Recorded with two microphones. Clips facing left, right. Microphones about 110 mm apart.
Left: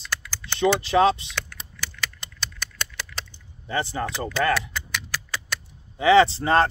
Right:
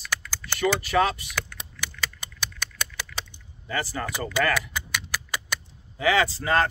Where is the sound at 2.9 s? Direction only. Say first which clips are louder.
Even; centre (ahead or behind).